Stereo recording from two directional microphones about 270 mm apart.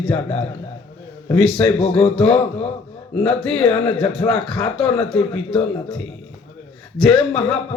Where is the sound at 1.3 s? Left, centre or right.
Centre.